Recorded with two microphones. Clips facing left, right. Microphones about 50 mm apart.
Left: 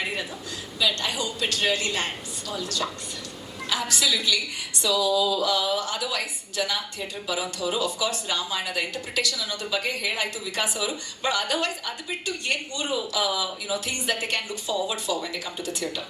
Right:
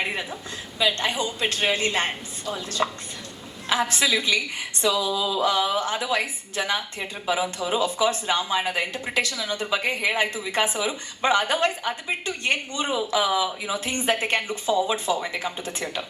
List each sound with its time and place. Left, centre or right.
0.8 s speech: right